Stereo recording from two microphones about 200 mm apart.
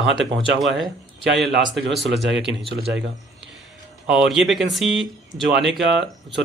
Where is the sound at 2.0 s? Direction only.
60° right (ahead or behind).